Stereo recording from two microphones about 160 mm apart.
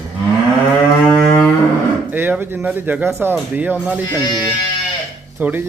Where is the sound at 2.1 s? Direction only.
10° right (ahead or behind).